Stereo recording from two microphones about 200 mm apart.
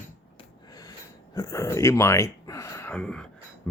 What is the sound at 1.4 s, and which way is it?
Speech, 15° left (ahead or behind).